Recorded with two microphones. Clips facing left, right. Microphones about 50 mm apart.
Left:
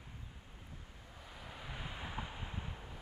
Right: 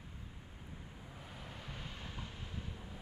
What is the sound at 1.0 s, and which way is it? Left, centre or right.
Vehicle, centre.